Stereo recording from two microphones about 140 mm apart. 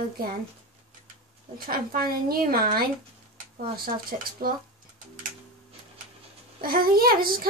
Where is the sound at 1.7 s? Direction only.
90° right.